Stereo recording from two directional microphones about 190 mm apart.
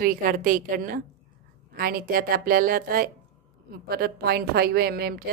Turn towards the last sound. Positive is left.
turn(degrees=-55)  # may be behind; listen again after turning